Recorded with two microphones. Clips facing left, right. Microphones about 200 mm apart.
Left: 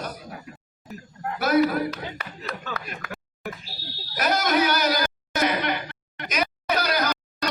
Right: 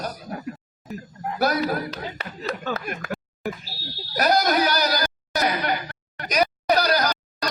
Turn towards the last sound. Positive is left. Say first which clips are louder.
# right 1 dB
turn(degrees=-35)  # may be behind; listen again after turning